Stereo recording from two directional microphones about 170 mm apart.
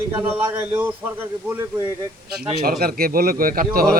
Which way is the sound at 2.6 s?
65° right (ahead or behind).